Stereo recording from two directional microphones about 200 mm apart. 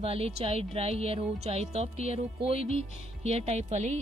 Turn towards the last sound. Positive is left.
turn(degrees=-35)  # may be behind; listen again after turning